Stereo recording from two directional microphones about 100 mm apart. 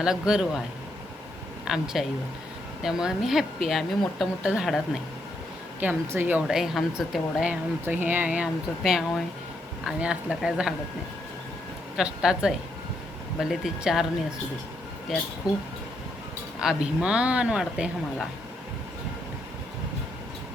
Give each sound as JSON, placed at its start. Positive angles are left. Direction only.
{"t": 0.0, "sound": "speech", "side_deg": -5}
{"t": 1.6, "sound": "speech", "side_deg": -5}
{"t": 5.8, "sound": "speech", "side_deg": -20}
{"t": 6.5, "sound": "speech", "side_deg": -5}
{"t": 8.8, "sound": "speech", "side_deg": 0}
{"t": 11.9, "sound": "speech", "side_deg": -5}
{"t": 15.1, "sound": "speech", "side_deg": -5}
{"t": 15.4, "sound": "speech", "side_deg": 40}
{"t": 16.6, "sound": "speech", "side_deg": -10}